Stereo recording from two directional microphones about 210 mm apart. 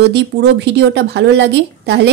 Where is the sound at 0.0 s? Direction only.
50° right (ahead or behind).